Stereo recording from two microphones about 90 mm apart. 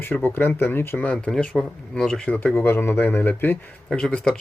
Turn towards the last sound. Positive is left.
turn(degrees=10)  # may be behind; listen again after turning